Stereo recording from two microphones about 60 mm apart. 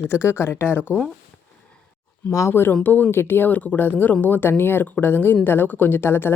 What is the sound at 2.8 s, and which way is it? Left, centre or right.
Speech, left.